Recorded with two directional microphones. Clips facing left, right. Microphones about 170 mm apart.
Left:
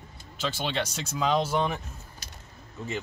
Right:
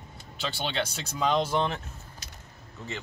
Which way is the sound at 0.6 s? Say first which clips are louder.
Right 1 dB; centre (ahead or behind).